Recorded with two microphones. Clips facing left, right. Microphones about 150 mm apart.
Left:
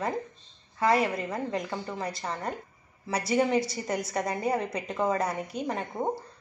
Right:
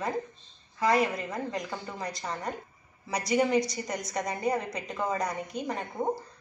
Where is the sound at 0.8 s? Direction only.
Centre (ahead or behind).